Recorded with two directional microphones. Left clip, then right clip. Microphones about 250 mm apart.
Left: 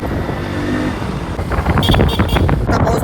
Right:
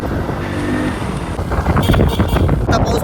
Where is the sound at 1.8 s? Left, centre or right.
Centre.